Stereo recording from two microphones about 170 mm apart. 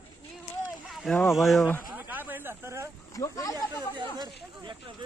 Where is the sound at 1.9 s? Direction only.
10° right (ahead or behind).